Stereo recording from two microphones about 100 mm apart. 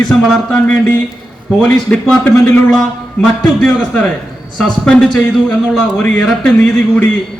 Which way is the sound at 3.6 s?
5° left (ahead or behind).